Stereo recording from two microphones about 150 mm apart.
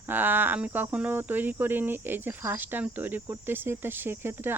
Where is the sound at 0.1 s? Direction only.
15° right (ahead or behind).